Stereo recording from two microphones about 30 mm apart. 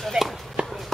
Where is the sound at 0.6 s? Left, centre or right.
Right.